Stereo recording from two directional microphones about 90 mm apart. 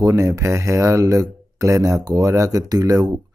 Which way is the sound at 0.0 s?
35° right (ahead or behind).